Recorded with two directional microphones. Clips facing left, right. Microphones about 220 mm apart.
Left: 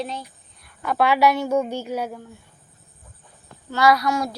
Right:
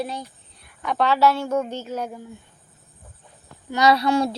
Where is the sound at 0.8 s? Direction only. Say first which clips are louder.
Left 1 dB; 5° left (ahead or behind).